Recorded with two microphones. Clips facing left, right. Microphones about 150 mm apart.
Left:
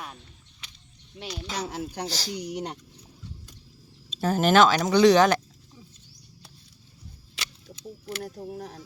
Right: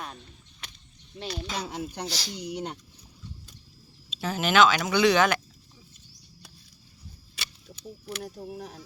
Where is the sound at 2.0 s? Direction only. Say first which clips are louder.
Left 2 dB; 40° left (ahead or behind).